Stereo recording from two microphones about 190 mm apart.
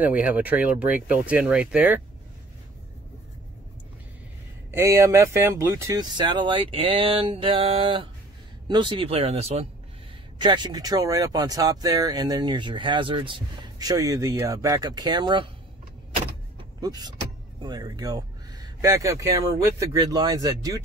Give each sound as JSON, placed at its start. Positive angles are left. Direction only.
{"t": 0.0, "sound": "speech", "side_deg": -10}
{"t": 4.6, "sound": "speech", "side_deg": -15}
{"t": 16.3, "sound": "vehicle", "side_deg": -25}
{"t": 17.6, "sound": "speech", "side_deg": -20}